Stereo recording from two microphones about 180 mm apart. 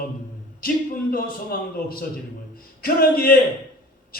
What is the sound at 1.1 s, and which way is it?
A man's voice, 55° left (ahead or behind).